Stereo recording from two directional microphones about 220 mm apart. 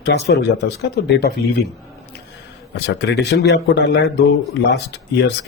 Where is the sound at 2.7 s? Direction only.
50° left (ahead or behind).